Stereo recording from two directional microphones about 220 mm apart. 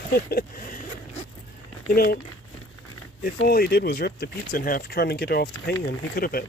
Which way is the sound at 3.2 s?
45° left (ahead or behind).